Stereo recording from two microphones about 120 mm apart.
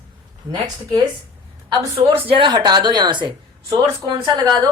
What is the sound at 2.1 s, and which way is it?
A woman's voice, 45° right (ahead or behind).